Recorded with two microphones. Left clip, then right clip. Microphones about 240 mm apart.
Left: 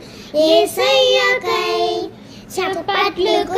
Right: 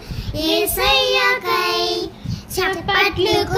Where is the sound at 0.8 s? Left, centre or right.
Right.